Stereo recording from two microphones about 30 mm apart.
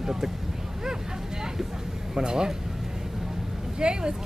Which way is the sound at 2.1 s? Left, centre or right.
Right.